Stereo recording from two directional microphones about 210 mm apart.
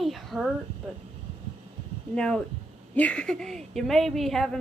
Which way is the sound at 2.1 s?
5° left (ahead or behind).